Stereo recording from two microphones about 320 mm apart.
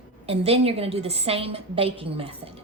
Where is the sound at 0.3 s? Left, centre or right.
Centre.